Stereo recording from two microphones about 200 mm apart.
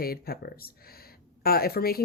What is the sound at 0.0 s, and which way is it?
Speech, 50° left (ahead or behind).